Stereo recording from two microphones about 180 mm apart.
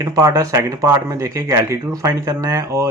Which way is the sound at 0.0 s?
20° right (ahead or behind).